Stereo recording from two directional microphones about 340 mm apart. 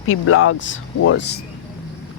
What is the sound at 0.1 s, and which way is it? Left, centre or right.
Speech, left.